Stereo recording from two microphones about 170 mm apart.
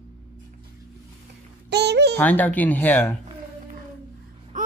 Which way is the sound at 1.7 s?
75° right (ahead or behind).